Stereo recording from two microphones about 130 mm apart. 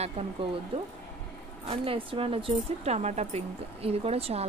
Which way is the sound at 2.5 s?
55° right (ahead or behind).